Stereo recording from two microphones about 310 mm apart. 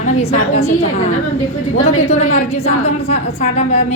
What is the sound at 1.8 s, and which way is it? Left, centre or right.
A woman's voice, centre.